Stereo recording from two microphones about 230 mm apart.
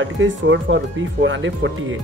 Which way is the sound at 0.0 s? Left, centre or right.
Right.